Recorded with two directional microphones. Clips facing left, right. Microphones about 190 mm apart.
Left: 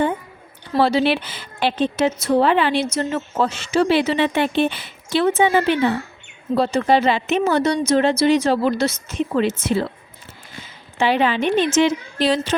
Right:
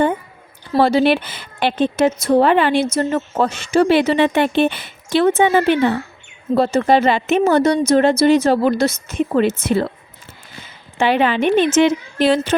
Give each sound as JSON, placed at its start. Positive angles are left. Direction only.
{"t": 0.7, "sound": "speech", "side_deg": -45}
{"t": 8.7, "sound": "a woman's voice", "side_deg": -10}
{"t": 9.6, "sound": "a woman's voice", "side_deg": -55}
{"t": 11.0, "sound": "a woman's voice", "side_deg": -55}